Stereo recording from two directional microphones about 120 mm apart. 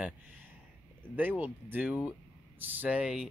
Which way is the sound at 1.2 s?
15° right (ahead or behind).